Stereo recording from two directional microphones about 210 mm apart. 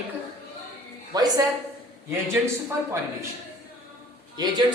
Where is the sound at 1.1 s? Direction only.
20° right (ahead or behind).